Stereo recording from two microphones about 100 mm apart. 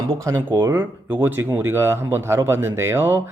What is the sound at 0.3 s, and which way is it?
Speech, 30° right (ahead or behind).